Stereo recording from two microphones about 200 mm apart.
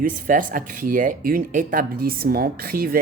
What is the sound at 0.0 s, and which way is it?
Speech, 40° right (ahead or behind).